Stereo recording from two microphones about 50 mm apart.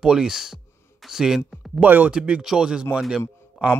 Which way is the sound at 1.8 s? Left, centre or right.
Right.